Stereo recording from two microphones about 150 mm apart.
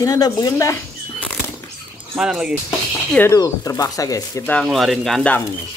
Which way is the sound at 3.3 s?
20° left (ahead or behind).